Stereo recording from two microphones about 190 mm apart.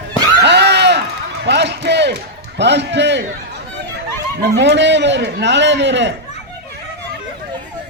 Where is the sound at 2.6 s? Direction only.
65° right (ahead or behind).